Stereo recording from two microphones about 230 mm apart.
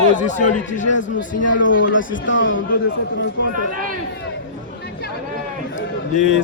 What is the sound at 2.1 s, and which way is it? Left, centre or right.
Speech, left.